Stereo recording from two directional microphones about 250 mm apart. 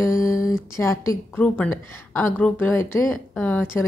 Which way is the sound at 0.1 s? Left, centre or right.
Left.